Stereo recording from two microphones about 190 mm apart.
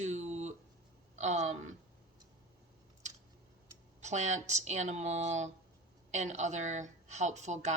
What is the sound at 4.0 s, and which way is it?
Speech, 35° right (ahead or behind).